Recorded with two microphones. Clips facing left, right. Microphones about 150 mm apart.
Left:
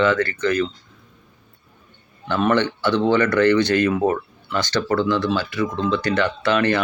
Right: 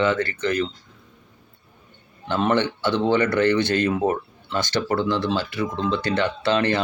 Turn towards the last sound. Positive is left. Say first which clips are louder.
# left 2 dB
turn(degrees=-25)  # may be behind; listen again after turning